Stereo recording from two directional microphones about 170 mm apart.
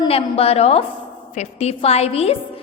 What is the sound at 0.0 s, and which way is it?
A woman's voice, 35° left (ahead or behind).